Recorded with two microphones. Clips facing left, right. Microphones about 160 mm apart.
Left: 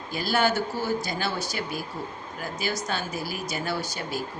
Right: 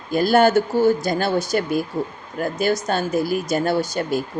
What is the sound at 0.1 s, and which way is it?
Speech, 50° right (ahead or behind).